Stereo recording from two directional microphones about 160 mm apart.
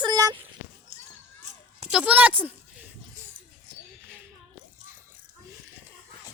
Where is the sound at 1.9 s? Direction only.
5° right (ahead or behind).